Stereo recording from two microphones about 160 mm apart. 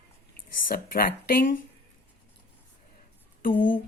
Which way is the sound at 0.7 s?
65° left (ahead or behind).